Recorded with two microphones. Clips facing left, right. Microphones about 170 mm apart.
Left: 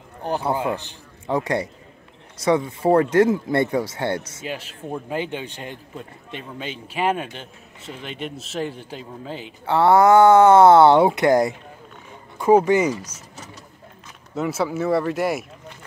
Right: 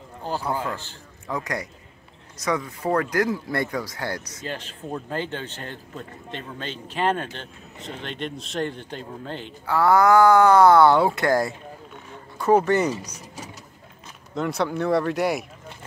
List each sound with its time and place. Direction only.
0.2 s speech: 20° left (ahead or behind)
1.2 s speech: 30° left (ahead or behind)
4.4 s speech: 10° left (ahead or behind)
9.7 s speech: 25° left (ahead or behind); by 12.9 s 10° left (ahead or behind)
14.3 s speech: 5° left (ahead or behind)